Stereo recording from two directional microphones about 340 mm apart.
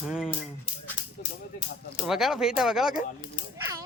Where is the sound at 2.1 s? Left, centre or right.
Centre.